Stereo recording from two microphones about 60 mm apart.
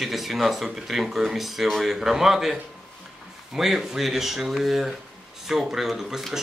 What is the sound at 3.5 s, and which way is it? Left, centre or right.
Speech, centre.